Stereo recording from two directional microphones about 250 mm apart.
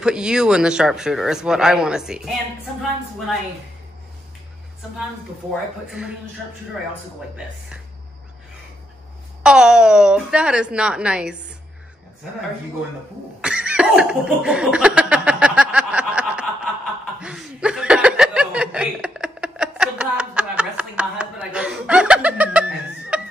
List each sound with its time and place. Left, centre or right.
0.0 s speech: centre
5.5 s speech: centre
9.4 s speech: centre
13.4 s cough: centre
17.2 s chuckle: centre